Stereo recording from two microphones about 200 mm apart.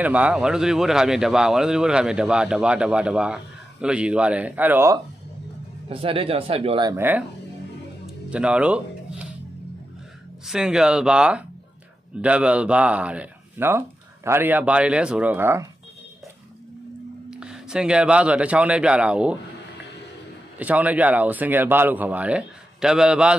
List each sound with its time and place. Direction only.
0.0 s speech: 5° right (ahead or behind)
5.9 s speech: 30° right (ahead or behind); by 7.2 s 10° right (ahead or behind)
8.3 s speech: 5° right (ahead or behind)
10.4 s speech: 5° right (ahead or behind)
17.3 s speech: 5° right (ahead or behind)
20.5 s speech: 5° right (ahead or behind)